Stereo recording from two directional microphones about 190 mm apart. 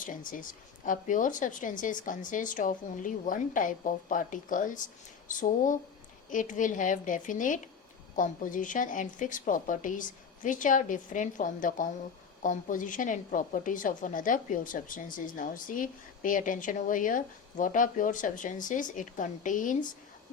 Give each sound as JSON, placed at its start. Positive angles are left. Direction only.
{"t": 0.9, "sound": "a woman's voice", "side_deg": 40}